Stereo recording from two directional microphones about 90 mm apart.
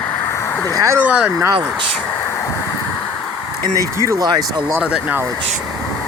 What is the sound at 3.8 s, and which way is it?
Speech, 35° right (ahead or behind).